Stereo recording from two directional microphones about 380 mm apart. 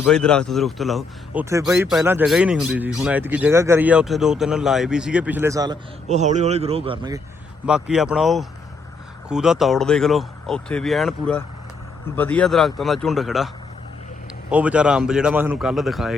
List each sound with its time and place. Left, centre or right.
0.0 s speech: centre
7.6 s speech: centre
14.5 s speech: centre